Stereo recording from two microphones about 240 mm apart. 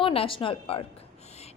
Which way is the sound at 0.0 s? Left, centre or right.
Left.